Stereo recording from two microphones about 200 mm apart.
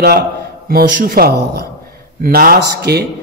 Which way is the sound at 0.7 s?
50° right (ahead or behind).